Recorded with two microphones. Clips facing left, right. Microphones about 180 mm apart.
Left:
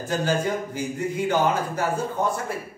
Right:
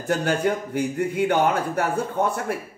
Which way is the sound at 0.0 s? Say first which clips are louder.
Right 2 dB; 60° right (ahead or behind).